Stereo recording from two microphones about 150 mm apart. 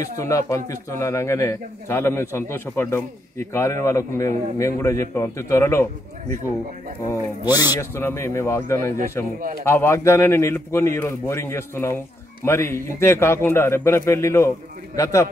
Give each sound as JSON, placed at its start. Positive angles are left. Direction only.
{"t": 0.2, "sound": "a man's voice", "side_deg": 20}
{"t": 7.7, "sound": "a man's voice", "side_deg": 15}